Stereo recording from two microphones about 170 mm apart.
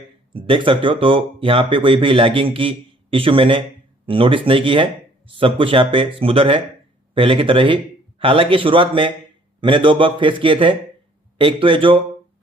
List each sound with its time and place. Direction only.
0.3 s a man's voice: 30° right (ahead or behind)